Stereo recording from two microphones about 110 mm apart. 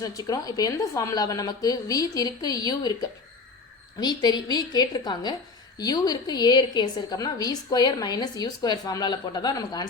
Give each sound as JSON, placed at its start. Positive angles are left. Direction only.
{"t": 0.0, "sound": "a woman's voice", "side_deg": 30}
{"t": 4.0, "sound": "a woman's voice", "side_deg": 40}